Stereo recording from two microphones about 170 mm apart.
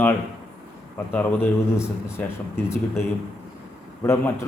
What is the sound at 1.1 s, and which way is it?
A man's voice, 10° left (ahead or behind).